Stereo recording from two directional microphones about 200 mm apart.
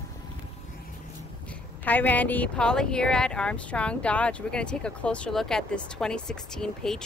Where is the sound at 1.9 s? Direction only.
10° left (ahead or behind).